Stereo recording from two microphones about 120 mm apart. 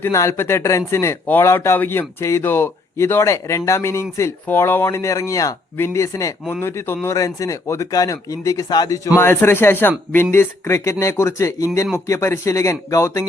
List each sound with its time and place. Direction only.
0.0 s speech: 20° left (ahead or behind)